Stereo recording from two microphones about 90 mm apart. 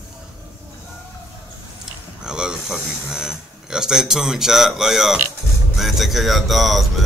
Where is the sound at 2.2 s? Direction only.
10° right (ahead or behind).